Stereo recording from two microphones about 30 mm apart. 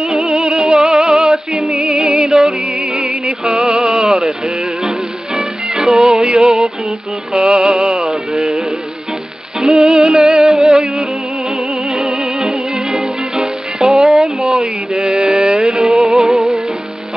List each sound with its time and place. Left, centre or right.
0.0 s music: centre
2.9 s music: centre
5.4 s music: right
7.3 s music: right
9.6 s music: centre
10.4 s music: centre
11.9 s music: right
12.3 s music: centre
13.9 s a sound: centre
15.0 s music: centre